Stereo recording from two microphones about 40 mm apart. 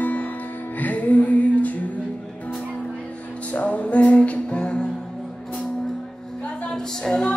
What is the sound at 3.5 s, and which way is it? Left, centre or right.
Music, left.